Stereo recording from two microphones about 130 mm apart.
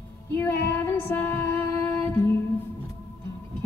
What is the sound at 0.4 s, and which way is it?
Female singing, 15° left (ahead or behind).